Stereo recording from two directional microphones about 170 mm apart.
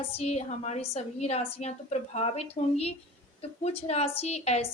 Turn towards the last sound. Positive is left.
turn(degrees=40)  # may be behind; listen again after turning